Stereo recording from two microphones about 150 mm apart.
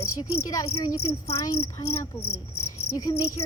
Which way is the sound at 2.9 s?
25° left (ahead or behind).